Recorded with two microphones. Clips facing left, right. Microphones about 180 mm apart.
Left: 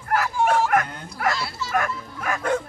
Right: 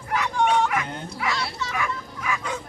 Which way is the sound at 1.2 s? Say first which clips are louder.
Left 4 dB; 50° left (ahead or behind).